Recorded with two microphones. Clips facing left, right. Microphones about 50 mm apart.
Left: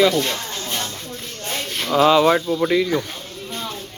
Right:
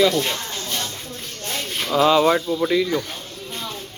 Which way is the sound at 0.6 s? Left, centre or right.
Centre.